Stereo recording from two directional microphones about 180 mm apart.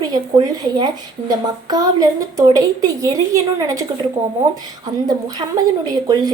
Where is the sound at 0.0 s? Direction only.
20° right (ahead or behind).